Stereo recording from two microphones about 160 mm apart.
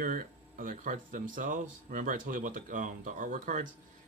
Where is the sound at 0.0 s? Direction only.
60° right (ahead or behind).